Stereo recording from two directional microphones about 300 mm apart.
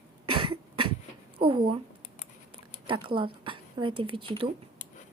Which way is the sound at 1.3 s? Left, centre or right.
Centre.